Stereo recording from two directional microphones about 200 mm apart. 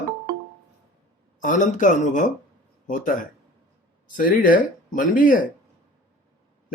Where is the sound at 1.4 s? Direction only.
40° left (ahead or behind).